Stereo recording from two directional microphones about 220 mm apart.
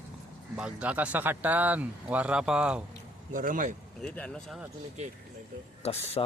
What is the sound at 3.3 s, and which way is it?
Speech, 35° right (ahead or behind).